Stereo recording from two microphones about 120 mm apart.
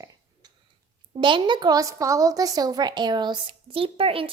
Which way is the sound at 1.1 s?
45° right (ahead or behind).